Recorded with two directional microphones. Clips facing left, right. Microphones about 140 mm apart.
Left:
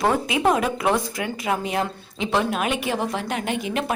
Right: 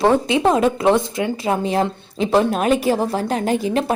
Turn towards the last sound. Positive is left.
turn(degrees=-35)  # may be behind; listen again after turning